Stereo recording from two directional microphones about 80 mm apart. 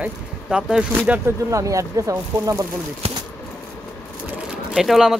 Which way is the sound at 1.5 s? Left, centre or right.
Right.